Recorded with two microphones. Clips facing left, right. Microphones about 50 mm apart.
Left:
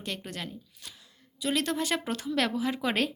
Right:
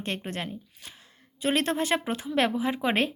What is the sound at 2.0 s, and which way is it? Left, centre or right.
Speech, right.